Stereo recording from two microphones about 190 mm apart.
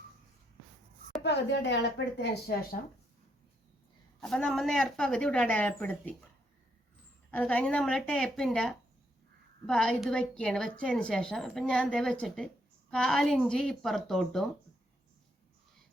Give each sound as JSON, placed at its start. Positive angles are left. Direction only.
{"t": 1.2, "sound": "speech", "side_deg": 65}
{"t": 4.2, "sound": "a woman's voice", "side_deg": 5}
{"t": 7.3, "sound": "a woman's voice", "side_deg": 10}